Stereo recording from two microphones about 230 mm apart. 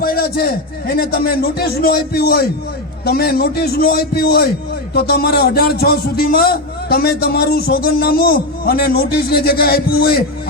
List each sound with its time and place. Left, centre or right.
0.0 s a man's voice: left